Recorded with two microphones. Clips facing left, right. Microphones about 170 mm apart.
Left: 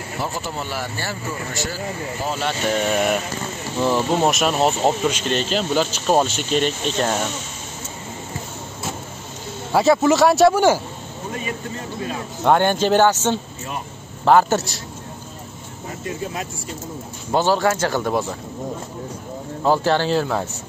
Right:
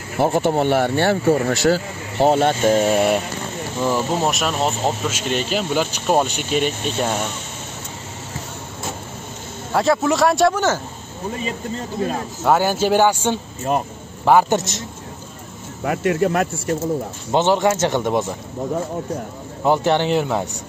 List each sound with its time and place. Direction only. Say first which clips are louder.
0.2 s speech: right 12 dB; 60° right (ahead or behind)
2.7 s speech: right 4 dB; 30° right (ahead or behind)
3.9 s speech: left 2 dB; centre (ahead or behind)
5.1 s speech: even; 10° right (ahead or behind)
9.7 s speech: left 2 dB; centre (ahead or behind)
12.4 s speech: even; 5° right (ahead or behind)
13.7 s speech: right 10 dB; 45° right (ahead or behind)
14.2 s speech: even; 15° right (ahead or behind)
15.8 s speech: right 10 dB; 80° right
17.3 s speech: right 1 dB; 20° right (ahead or behind)
19.6 s speech: right 1 dB; 20° right (ahead or behind)